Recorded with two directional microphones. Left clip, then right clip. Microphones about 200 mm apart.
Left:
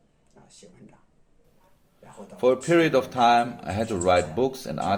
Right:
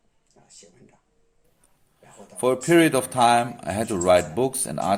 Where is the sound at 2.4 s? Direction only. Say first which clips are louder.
Right 2 dB; 30° right (ahead or behind).